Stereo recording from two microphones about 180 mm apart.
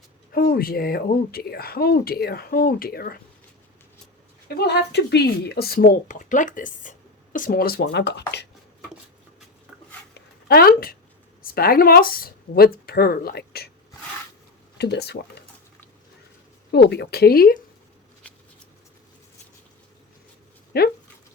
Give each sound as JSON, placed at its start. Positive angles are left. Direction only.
{"t": 0.3, "sound": "speech", "side_deg": 55}
{"t": 4.4, "sound": "speech", "side_deg": 65}
{"t": 10.2, "sound": "a sound", "side_deg": 60}
{"t": 11.4, "sound": "speech", "side_deg": 55}
{"t": 14.8, "sound": "speech", "side_deg": 65}
{"t": 16.7, "sound": "speech", "side_deg": 65}
{"t": 20.7, "sound": "speech", "side_deg": 60}